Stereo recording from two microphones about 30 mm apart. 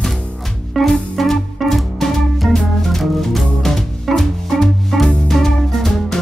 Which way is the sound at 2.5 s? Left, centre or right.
Centre.